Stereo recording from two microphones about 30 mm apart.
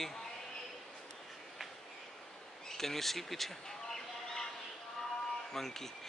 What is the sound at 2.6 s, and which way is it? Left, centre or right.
Speech, centre.